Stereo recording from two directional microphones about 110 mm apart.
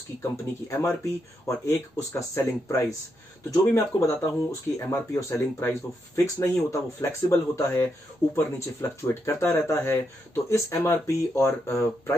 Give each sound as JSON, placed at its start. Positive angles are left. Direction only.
{"t": 0.2, "sound": "speech", "side_deg": 20}